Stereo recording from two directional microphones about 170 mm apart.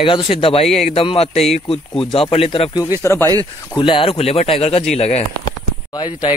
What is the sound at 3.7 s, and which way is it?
Speech, 30° left (ahead or behind).